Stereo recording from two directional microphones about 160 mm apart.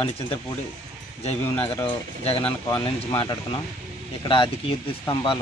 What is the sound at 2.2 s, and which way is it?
A man's voice, 35° left (ahead or behind).